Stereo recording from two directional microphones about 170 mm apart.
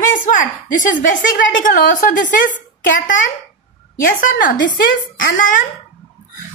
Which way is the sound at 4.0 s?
55° left (ahead or behind).